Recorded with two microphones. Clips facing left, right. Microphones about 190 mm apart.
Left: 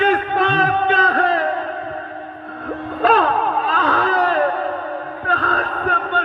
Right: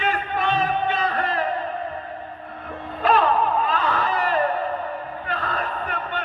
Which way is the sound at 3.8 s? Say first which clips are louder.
Left 5 dB; 90° left.